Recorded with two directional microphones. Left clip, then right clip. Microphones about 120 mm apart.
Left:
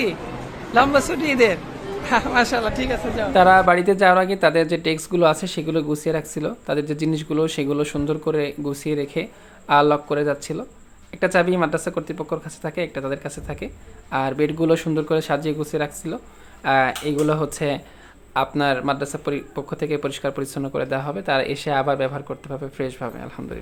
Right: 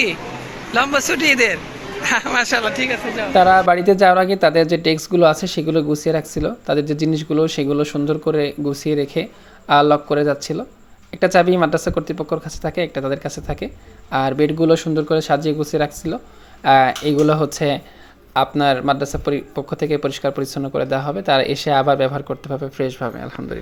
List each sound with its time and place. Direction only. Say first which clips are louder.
0.7 s a man's voice: even; centre (ahead or behind)
2.7 s speech: right 3 dB; 30° left (ahead or behind)
3.3 s speech: right 2 dB; 25° right (ahead or behind)
14.7 s speech: right 4 dB; 10° right (ahead or behind)